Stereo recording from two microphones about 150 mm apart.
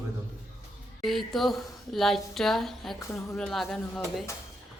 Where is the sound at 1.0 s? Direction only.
Centre (ahead or behind).